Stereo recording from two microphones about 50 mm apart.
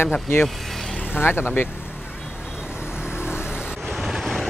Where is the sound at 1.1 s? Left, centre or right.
Left.